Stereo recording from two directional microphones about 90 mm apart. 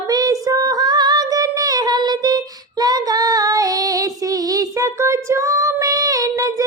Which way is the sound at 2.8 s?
45° right (ahead or behind).